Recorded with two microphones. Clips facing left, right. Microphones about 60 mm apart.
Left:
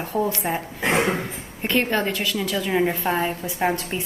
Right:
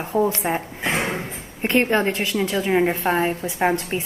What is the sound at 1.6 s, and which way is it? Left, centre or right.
A woman's voice, right.